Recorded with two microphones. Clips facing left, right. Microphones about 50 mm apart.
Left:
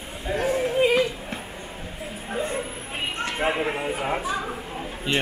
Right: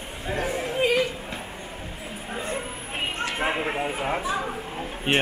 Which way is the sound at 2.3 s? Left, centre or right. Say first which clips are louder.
Left 3 dB; centre.